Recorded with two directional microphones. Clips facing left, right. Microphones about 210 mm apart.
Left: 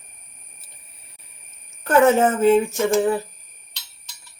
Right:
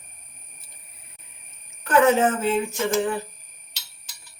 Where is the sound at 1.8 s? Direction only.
45° left (ahead or behind).